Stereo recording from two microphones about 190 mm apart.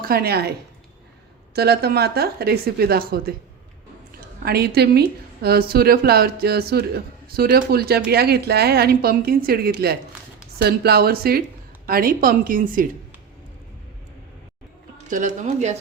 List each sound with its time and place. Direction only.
0.0 s a woman's voice: 55° right (ahead or behind)
1.5 s a woman's voice: 55° right (ahead or behind)
4.4 s a woman's voice: 55° right (ahead or behind)
15.1 s speech: 40° right (ahead or behind)